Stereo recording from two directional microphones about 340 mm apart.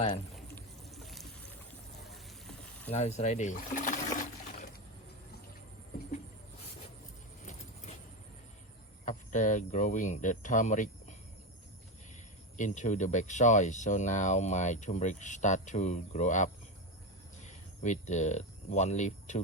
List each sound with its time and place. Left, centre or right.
0.3 s a sound: centre
2.9 s speech: centre
7.4 s vehicle: left
9.0 s speech: left
12.5 s speech: left
18.0 s speech: left